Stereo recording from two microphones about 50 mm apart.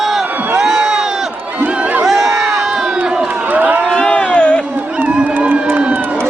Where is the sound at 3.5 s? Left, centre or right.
Right.